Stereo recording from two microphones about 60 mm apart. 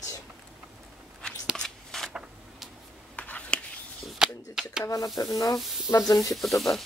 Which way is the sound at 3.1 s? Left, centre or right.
Left.